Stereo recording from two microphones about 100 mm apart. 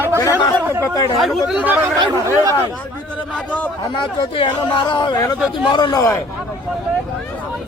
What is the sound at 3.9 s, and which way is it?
Speech, 50° left (ahead or behind).